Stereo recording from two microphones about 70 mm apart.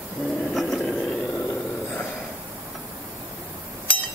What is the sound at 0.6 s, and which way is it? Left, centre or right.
Vehicle, centre.